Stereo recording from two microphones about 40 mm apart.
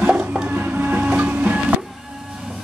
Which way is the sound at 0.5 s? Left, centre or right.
Right.